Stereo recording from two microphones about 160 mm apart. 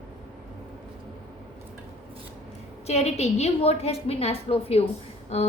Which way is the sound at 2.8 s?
40° left (ahead or behind).